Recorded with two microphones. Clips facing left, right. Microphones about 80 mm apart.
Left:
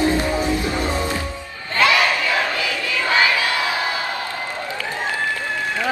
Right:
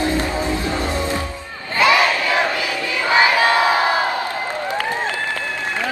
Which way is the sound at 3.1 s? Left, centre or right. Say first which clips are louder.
Right 5 dB; right.